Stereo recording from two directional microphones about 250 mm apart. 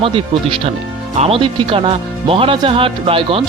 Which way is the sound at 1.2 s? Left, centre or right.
Right.